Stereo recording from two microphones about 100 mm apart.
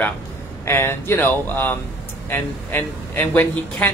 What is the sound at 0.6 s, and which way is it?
Speech, 25° left (ahead or behind).